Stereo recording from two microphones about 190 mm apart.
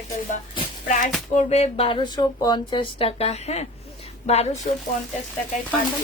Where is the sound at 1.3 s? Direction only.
35° left (ahead or behind).